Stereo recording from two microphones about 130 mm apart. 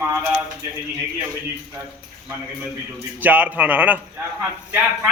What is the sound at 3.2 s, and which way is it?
Speech, 10° right (ahead or behind).